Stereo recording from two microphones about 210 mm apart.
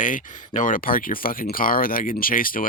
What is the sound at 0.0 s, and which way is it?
Speech, 40° left (ahead or behind).